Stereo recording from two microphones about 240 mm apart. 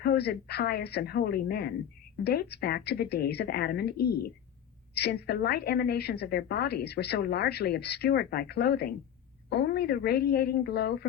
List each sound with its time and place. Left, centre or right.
0.0 s a woman's voice: left